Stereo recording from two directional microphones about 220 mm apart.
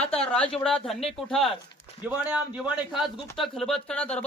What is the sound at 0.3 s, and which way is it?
A man's voice, 5° left (ahead or behind).